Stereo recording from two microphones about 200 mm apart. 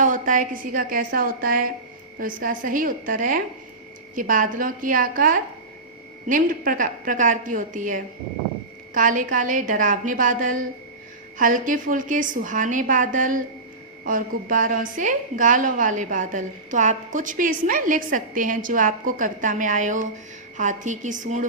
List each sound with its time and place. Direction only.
0.0 s a woman's voice: 40° right (ahead or behind)